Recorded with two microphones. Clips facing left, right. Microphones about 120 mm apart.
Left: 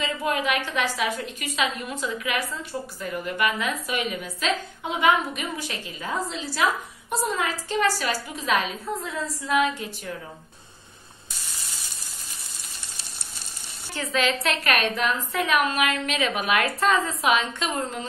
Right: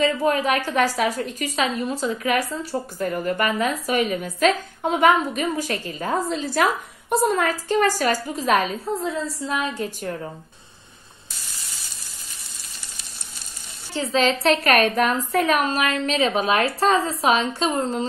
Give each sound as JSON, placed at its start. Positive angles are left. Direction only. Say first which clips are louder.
{"t": 0.0, "sound": "a woman's voice", "louder": "right 6 dB", "side_deg": -40}
{"t": 8.8, "sound": "a woman's voice", "louder": "right 4 dB", "side_deg": -30}
{"t": 13.9, "sound": "a woman's voice", "louder": "right 4 dB", "side_deg": -30}